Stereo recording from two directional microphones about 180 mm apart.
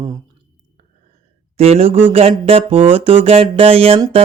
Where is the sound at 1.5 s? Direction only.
35° right (ahead or behind).